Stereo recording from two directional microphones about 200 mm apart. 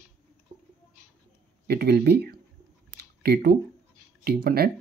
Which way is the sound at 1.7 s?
50° right (ahead or behind).